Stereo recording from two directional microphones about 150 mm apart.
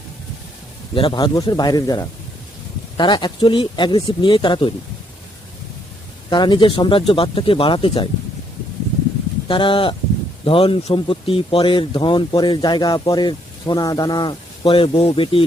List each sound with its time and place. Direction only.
0.9 s speech: 35° left (ahead or behind)
6.3 s speech: 30° left (ahead or behind)
9.5 s speech: 35° left (ahead or behind)